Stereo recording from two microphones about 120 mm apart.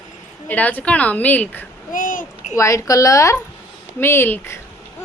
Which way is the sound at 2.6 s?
25° left (ahead or behind).